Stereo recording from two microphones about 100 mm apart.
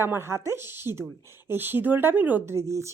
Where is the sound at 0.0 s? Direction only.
25° right (ahead or behind).